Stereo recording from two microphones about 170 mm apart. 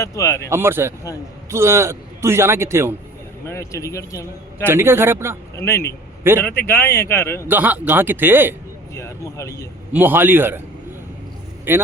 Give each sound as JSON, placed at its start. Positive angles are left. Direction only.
{"t": 0.0, "sound": "speech", "side_deg": 20}
{"t": 0.5, "sound": "a man's voice", "side_deg": -15}
{"t": 3.4, "sound": "speech", "side_deg": 15}
{"t": 4.6, "sound": "a man's voice", "side_deg": -15}
{"t": 5.5, "sound": "speech", "side_deg": 15}
{"t": 6.3, "sound": "a man's voice", "side_deg": -15}
{"t": 6.7, "sound": "speech", "side_deg": 15}
{"t": 7.4, "sound": "a man's voice", "side_deg": -10}
{"t": 9.0, "sound": "a sound", "side_deg": 15}
{"t": 9.9, "sound": "a man's voice", "side_deg": -10}
{"t": 11.7, "sound": "a man's voice", "side_deg": -10}